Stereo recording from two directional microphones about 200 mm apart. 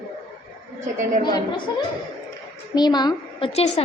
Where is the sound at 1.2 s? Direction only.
25° left (ahead or behind).